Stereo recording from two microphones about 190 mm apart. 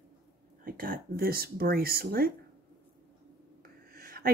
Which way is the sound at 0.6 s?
50° right (ahead or behind).